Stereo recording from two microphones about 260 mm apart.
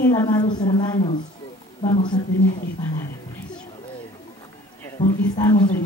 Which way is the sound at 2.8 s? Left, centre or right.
Centre.